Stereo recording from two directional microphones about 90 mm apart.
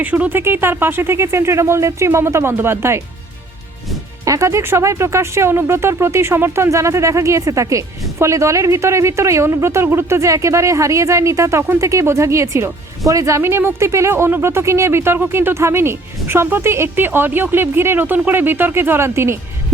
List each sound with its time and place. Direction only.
0.0 s speech: 15° right (ahead or behind)
4.3 s speech: 35° right (ahead or behind)